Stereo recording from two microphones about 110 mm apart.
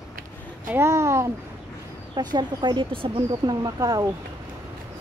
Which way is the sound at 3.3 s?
35° right (ahead or behind).